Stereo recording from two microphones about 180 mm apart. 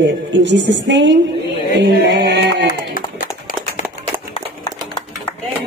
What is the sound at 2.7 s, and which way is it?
Music, 50° left (ahead or behind).